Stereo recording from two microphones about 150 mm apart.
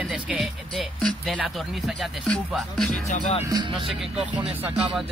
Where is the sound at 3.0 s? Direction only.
45° left (ahead or behind).